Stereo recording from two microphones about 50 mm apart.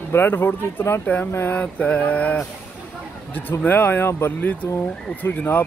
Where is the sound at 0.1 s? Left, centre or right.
Left.